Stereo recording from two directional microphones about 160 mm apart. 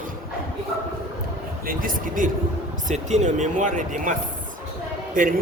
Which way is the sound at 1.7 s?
60° right (ahead or behind).